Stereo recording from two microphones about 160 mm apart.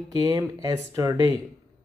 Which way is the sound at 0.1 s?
25° right (ahead or behind).